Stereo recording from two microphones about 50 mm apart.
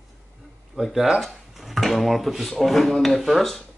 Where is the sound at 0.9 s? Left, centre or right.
Centre.